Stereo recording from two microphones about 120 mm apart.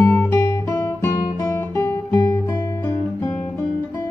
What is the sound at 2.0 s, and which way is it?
Guitar, 15° left (ahead or behind).